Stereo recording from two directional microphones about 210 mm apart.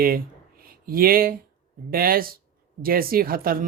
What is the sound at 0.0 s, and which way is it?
Speech, 45° right (ahead or behind).